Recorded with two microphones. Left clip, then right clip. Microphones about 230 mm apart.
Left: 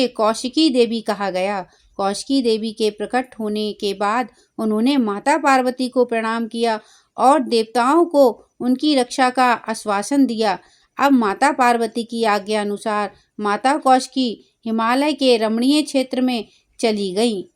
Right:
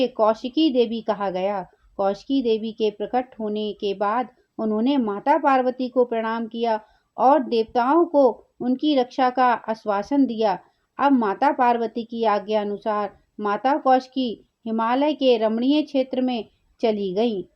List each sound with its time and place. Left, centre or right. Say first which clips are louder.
0.0 s speech: left 2 dB; left